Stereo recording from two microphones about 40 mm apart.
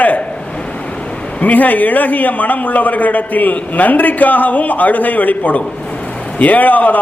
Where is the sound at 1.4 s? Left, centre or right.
Left.